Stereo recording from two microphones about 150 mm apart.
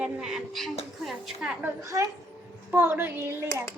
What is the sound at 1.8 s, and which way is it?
A woman's voice, 20° right (ahead or behind).